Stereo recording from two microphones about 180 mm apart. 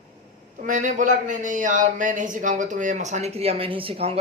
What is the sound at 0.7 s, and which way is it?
Speech, 45° right (ahead or behind).